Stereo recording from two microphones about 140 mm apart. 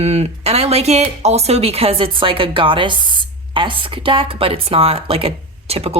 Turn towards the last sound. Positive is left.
turn(degrees=-45)  # may be behind; listen again after turning